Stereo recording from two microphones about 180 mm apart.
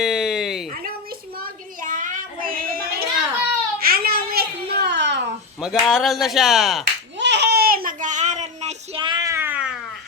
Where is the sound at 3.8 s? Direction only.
55° right (ahead or behind); by 5.2 s 70° right (ahead or behind).